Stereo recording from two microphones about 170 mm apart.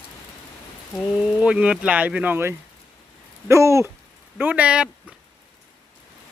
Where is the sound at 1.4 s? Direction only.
5° right (ahead or behind).